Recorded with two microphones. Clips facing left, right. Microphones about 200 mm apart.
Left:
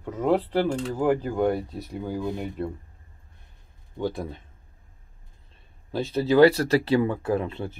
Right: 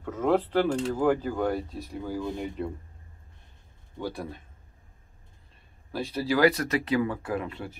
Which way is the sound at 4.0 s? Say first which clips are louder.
Left 5 dB; 20° left (ahead or behind).